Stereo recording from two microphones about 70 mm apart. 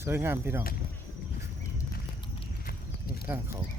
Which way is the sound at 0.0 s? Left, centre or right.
Right.